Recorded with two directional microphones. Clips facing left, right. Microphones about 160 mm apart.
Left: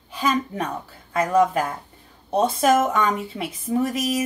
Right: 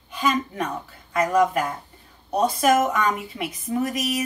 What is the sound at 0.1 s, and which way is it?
A woman's voice, 30° left (ahead or behind).